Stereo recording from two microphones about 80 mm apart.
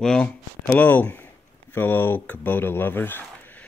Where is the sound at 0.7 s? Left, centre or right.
Left.